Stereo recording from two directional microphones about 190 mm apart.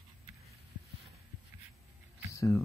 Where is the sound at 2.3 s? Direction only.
15° left (ahead or behind).